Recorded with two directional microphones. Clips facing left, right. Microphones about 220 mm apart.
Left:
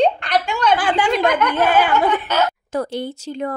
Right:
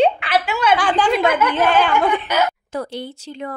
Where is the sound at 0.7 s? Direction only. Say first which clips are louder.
Right 2 dB; 10° left (ahead or behind).